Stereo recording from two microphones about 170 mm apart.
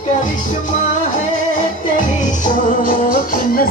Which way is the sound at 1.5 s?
50° left (ahead or behind).